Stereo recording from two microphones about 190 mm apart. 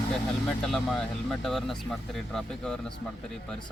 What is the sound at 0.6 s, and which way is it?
Speech, centre (ahead or behind).